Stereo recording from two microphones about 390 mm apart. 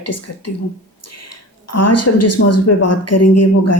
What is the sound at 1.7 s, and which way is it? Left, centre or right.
A woman's voice, left.